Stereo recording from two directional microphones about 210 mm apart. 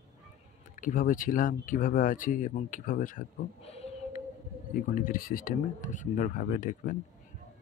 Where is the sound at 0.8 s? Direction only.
40° left (ahead or behind).